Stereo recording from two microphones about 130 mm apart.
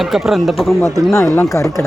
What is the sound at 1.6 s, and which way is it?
Speech, 15° left (ahead or behind).